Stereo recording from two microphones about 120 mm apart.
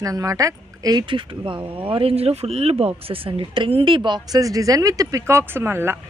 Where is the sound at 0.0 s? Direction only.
30° right (ahead or behind).